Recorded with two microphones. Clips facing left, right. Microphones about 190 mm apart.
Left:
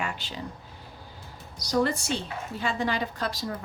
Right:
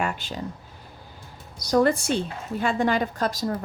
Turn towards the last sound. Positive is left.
turn(degrees=-45)  # may be behind; listen again after turning